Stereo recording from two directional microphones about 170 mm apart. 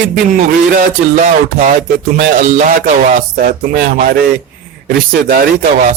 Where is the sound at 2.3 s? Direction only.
50° right (ahead or behind).